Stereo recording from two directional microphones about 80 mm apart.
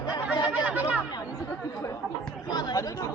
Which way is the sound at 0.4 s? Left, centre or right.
Centre.